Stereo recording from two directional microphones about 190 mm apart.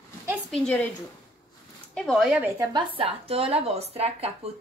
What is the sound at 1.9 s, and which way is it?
Speech, 5° left (ahead or behind).